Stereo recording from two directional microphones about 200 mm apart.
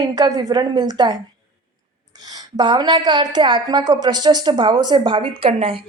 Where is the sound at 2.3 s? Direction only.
20° right (ahead or behind).